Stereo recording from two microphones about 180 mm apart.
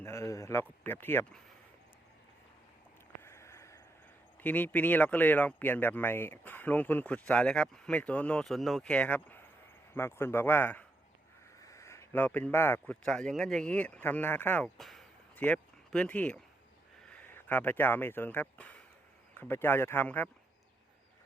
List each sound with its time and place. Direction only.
0.0 s a man's voice: 15° left (ahead or behind)
3.2 s a sound: 15° left (ahead or behind)
4.4 s speech: 10° left (ahead or behind)